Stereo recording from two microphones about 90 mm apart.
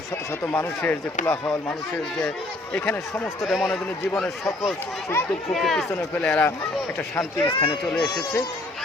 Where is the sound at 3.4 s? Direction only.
5° right (ahead or behind).